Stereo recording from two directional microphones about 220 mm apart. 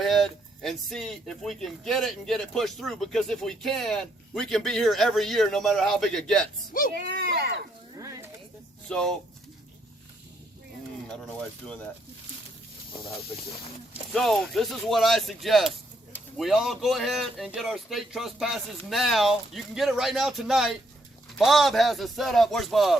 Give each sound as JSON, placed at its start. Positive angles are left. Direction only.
{"t": 0.0, "sound": "speech", "side_deg": 0}
{"t": 6.9, "sound": "speech", "side_deg": -45}
{"t": 7.9, "sound": "a sound", "side_deg": -15}
{"t": 8.9, "sound": "speech", "side_deg": 5}
{"t": 13.9, "sound": "speech", "side_deg": 0}